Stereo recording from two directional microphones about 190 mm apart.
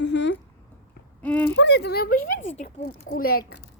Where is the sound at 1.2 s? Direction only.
10° left (ahead or behind).